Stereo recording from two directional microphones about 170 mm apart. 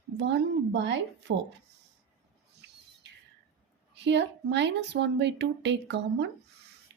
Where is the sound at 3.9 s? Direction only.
90° right.